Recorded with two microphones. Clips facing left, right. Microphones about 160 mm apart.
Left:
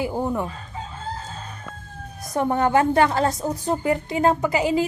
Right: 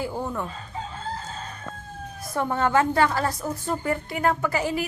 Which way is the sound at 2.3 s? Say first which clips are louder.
Left 3 dB; 20° left (ahead or behind).